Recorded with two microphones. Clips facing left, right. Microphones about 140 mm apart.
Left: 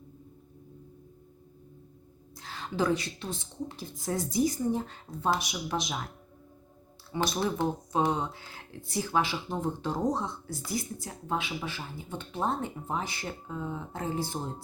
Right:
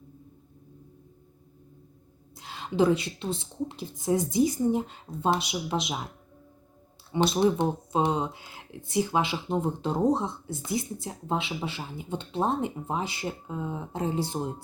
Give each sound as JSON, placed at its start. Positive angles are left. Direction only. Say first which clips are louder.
{"t": 2.3, "sound": "a woman's voice", "louder": "right 5 dB", "side_deg": -20}
{"t": 7.1, "sound": "speech", "louder": "right 6 dB", "side_deg": -20}